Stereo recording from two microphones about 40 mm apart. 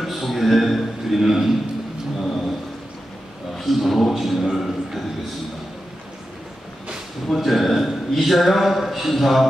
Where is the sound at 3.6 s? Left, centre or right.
Centre.